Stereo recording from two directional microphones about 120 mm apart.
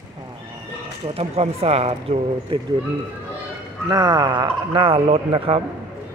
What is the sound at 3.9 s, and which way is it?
Speech, 35° right (ahead or behind).